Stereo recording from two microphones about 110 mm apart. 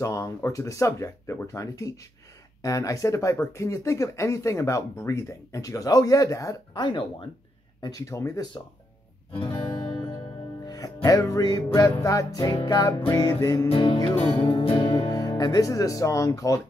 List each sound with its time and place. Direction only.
0.0 s speech: 30° left (ahead or behind)
6.7 s speech: 45° left (ahead or behind)
7.8 s music: 30° left (ahead or behind)
9.4 s music: 45° left (ahead or behind)
13.7 s speech: 50° left (ahead or behind)
14.5 s music: 55° left (ahead or behind); by 16.6 s 30° left (ahead or behind)